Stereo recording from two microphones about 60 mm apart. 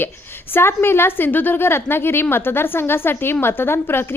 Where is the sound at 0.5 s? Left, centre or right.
Left.